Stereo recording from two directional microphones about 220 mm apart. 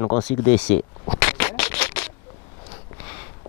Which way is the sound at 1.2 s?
10° left (ahead or behind).